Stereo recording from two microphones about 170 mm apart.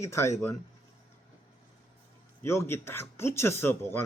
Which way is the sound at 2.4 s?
15° left (ahead or behind).